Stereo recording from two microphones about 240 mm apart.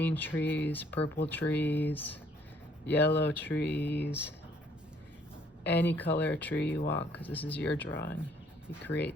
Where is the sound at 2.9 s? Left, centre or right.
Left.